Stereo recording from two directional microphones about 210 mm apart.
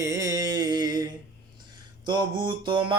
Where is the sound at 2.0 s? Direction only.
20° right (ahead or behind).